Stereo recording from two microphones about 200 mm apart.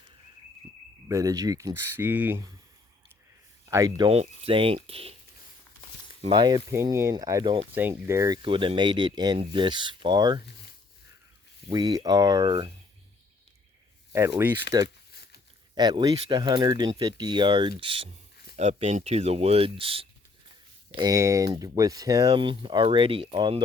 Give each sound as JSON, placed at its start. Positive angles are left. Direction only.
{"t": 1.0, "sound": "speech", "side_deg": -15}
{"t": 3.7, "sound": "speech", "side_deg": -15}
{"t": 6.2, "sound": "speech", "side_deg": -25}
{"t": 11.7, "sound": "speech", "side_deg": -20}
{"t": 14.1, "sound": "speech", "side_deg": -15}
{"t": 14.8, "sound": "a sound", "side_deg": 55}
{"t": 15.7, "sound": "speech", "side_deg": -20}